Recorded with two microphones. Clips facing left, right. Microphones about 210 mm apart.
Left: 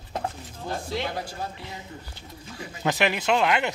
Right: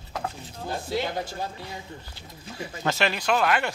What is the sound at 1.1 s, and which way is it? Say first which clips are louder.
Speech: right 2 dB; 25° right (ahead or behind).